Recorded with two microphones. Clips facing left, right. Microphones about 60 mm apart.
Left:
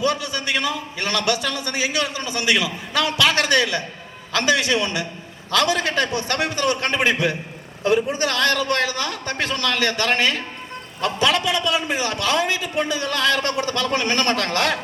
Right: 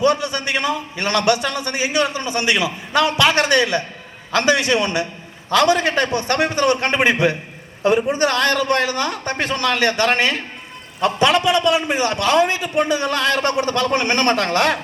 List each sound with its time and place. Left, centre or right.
0.0 s a man's voice: right